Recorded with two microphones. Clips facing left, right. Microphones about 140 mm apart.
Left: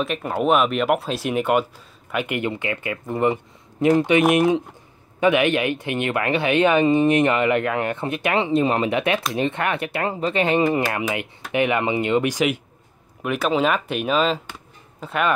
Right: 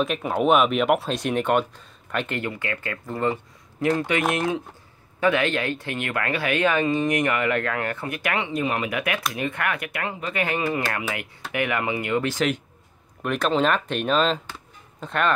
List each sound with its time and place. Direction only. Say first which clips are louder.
0.0 s speech: even; centre (ahead or behind)